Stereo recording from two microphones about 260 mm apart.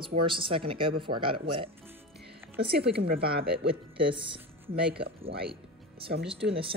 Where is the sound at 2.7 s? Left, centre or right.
Right.